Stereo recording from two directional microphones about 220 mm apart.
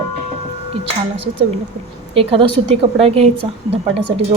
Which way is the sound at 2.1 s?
25° right (ahead or behind).